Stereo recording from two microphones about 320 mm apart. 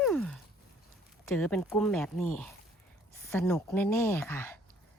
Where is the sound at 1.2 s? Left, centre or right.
Centre.